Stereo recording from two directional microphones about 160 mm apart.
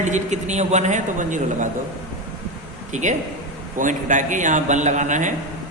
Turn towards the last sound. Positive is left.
turn(degrees=-50)  # may be behind; listen again after turning